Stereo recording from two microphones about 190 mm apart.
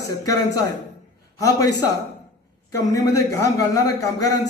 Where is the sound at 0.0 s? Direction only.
20° left (ahead or behind).